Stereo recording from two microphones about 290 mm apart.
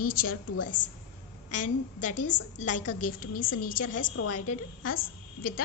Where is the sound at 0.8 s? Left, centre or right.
Left.